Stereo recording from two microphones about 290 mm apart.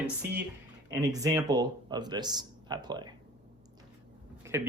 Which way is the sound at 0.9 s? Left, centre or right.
Centre.